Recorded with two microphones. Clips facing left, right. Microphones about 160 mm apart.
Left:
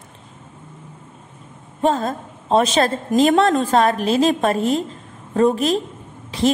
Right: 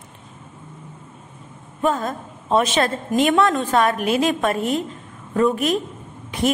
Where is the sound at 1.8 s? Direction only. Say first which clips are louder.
Left 2 dB; 30° left (ahead or behind).